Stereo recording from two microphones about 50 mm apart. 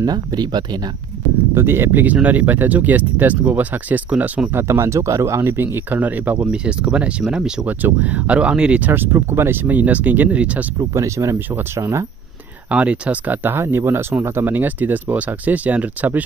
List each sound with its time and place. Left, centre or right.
1.5 s speech: right
1.9 s speech: right
4.6 s speech: right
5.9 s speech: right; by 7.6 s centre
7.6 s speech: right
8.8 s speech: right
11.0 s speech: right
11.7 s speech: right
12.6 s speech: right
13.3 s speech: right
13.6 s speech: right
14.4 s speech: right